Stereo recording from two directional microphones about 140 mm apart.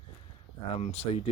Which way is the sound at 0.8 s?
45° left (ahead or behind).